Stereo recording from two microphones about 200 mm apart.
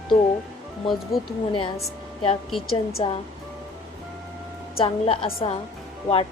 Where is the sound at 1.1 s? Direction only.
Centre (ahead or behind).